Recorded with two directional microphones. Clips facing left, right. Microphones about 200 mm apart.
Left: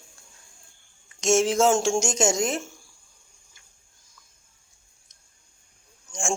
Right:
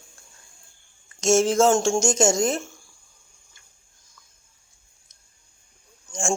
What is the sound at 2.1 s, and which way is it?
Speech, 20° left (ahead or behind).